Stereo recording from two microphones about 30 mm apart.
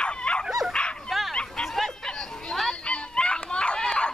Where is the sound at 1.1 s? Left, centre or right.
Centre.